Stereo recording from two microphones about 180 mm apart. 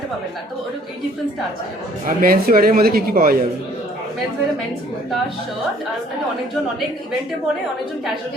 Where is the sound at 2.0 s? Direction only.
55° right (ahead or behind).